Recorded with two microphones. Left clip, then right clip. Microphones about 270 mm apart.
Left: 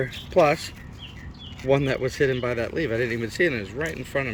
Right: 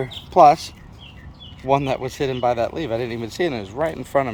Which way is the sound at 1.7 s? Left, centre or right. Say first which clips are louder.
Right 2 dB; centre.